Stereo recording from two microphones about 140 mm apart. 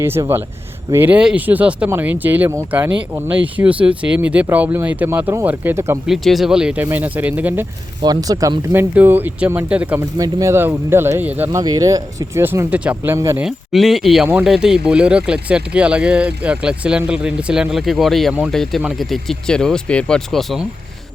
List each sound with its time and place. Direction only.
0.0 s speech: 15° right (ahead or behind)
6.1 s speech: centre (ahead or behind)
8.0 s speech: 25° right (ahead or behind); by 10.1 s 10° right (ahead or behind)
10.2 s speech: 25° right (ahead or behind)
11.6 s speech: 25° right (ahead or behind)
13.4 s speech: centre (ahead or behind)